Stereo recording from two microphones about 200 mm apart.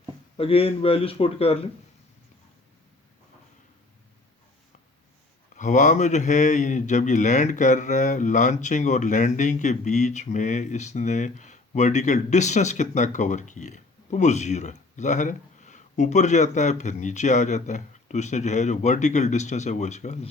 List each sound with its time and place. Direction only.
0.3 s a man's voice: 30° left (ahead or behind)
5.5 s speech: 40° left (ahead or behind)